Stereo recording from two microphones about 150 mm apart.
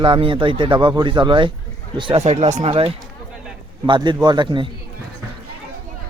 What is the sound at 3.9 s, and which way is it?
Speech, 30° right (ahead or behind).